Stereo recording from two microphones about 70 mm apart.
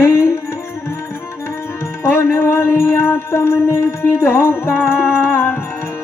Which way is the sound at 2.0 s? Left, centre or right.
Left.